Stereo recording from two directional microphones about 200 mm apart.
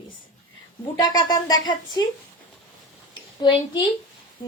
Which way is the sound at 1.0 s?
20° left (ahead or behind).